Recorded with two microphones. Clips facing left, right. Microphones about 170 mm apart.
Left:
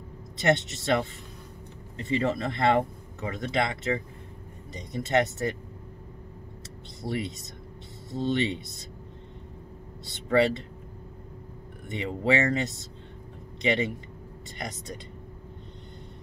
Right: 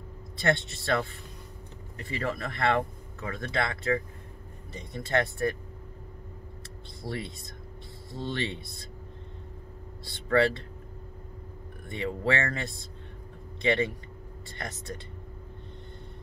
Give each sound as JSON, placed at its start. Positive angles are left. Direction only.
{"t": 0.4, "sound": "speech", "side_deg": 20}
{"t": 7.0, "sound": "speech", "side_deg": 20}
{"t": 10.3, "sound": "speech", "side_deg": 20}
{"t": 11.9, "sound": "speech", "side_deg": 20}